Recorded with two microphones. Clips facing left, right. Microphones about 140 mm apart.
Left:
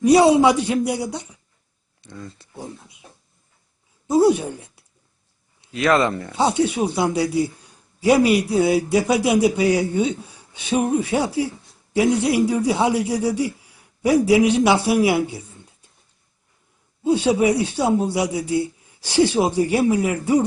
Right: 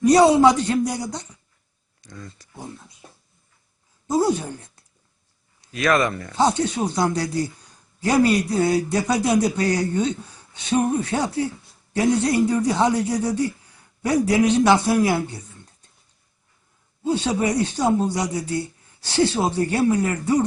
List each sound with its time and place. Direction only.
0.0 s a man's voice: 10° left (ahead or behind)
4.0 s speech: 10° left (ahead or behind)
5.7 s speech: 25° left (ahead or behind)
6.3 s a man's voice: 10° left (ahead or behind)
17.0 s a man's voice: 10° left (ahead or behind)